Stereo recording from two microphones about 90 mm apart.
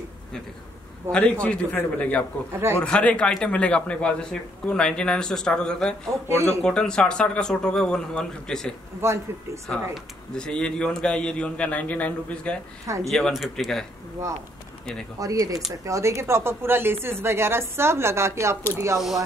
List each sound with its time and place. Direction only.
1.1 s a woman's voice: 25° right (ahead or behind)
1.4 s a man's voice: 15° left (ahead or behind)
2.5 s a woman's voice: 30° right (ahead or behind)
2.8 s a man's voice: 15° left (ahead or behind)
6.2 s speech: 35° right (ahead or behind)
6.6 s a man's voice: 10° left (ahead or behind)
9.0 s speech: 30° right (ahead or behind)
9.9 s a man's voice: 10° left (ahead or behind)
12.8 s speech: 35° right (ahead or behind)
13.1 s speech: centre (ahead or behind)
15.1 s a woman's voice: 40° right (ahead or behind)
18.9 s speech: centre (ahead or behind)